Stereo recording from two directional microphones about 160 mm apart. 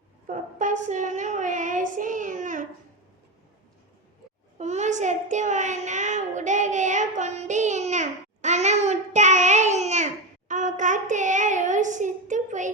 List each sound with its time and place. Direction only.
0.3 s child singing: 50° right (ahead or behind)
4.5 s a child's voice: 45° right (ahead or behind)
10.5 s child singing: 50° right (ahead or behind)